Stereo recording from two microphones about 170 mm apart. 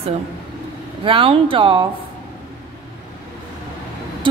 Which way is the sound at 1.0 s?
30° right (ahead or behind).